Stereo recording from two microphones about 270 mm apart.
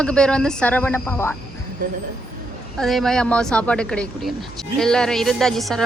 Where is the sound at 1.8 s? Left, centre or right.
Right.